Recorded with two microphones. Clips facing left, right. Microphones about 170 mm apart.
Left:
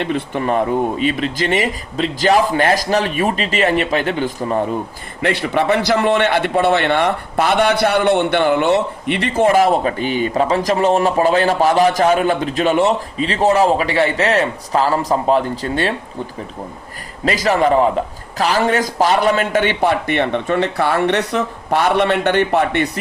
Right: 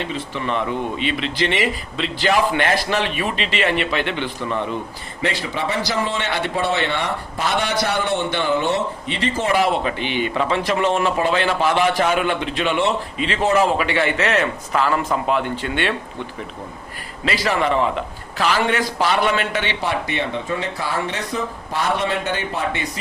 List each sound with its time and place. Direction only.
0.0 s a man's voice: 55° left (ahead or behind); by 4.8 s 40° left (ahead or behind)
5.2 s a man's voice: 60° left (ahead or behind); by 16.0 s 35° left (ahead or behind)
17.2 s a man's voice: 40° left (ahead or behind); by 22.9 s 65° left (ahead or behind)